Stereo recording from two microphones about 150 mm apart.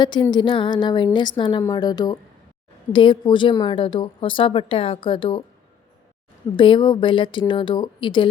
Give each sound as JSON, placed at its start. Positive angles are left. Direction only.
{"t": 0.0, "sound": "a woman's voice", "side_deg": 30}
{"t": 6.6, "sound": "a woman's voice", "side_deg": 30}